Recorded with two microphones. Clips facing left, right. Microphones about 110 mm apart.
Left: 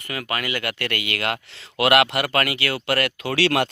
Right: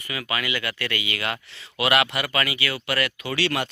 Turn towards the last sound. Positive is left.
turn(degrees=80)